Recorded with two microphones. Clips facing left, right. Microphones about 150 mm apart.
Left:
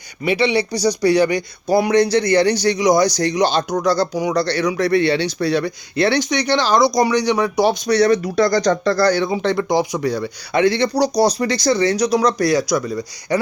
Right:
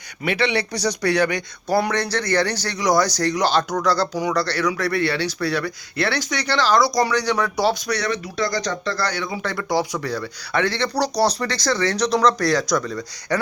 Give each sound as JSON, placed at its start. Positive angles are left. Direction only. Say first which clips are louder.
{"t": 0.5, "sound": "speech", "louder": "left 5 dB", "side_deg": 0}
{"t": 1.7, "sound": "a man's voice", "louder": "left 6 dB", "side_deg": 15}
{"t": 7.9, "sound": "speech", "louder": "left 10 dB", "side_deg": 35}
{"t": 8.4, "sound": "a man's voice", "louder": "left 8 dB", "side_deg": 50}